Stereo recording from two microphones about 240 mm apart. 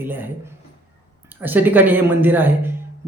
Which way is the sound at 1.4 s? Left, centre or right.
Centre.